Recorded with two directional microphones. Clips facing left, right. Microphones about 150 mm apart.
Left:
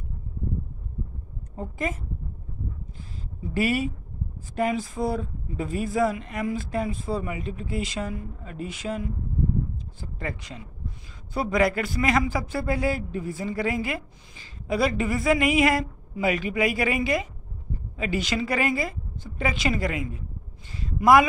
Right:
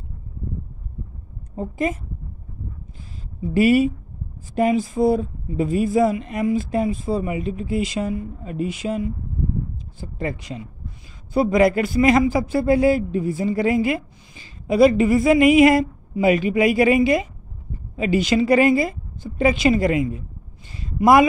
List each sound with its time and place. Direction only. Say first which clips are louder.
1.6 s a woman's voice: right 6 dB; 20° right (ahead or behind)
3.5 s a man's voice: right 9 dB; 15° right (ahead or behind)
20.7 s a sound: right 3 dB; 20° right (ahead or behind)